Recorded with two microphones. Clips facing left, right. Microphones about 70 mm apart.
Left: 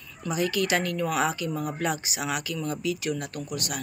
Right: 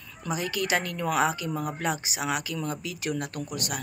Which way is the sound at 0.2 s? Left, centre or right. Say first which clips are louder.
Left 3 dB; right.